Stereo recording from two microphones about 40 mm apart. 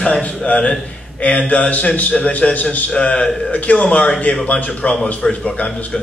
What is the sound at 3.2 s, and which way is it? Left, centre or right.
Speech, left.